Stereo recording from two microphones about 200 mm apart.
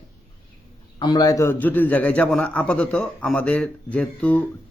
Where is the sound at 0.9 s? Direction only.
20° left (ahead or behind).